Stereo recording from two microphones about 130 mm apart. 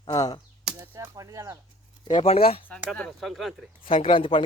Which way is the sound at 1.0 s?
25° right (ahead or behind).